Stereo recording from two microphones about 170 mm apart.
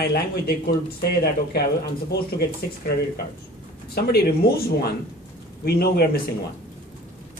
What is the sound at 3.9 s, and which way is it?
Speech, 70° left (ahead or behind).